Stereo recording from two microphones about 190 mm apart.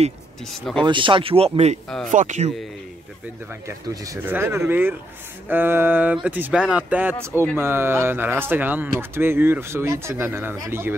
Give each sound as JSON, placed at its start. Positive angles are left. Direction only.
{"t": 0.7, "sound": "speech", "side_deg": -25}
{"t": 3.6, "sound": "speech", "side_deg": -20}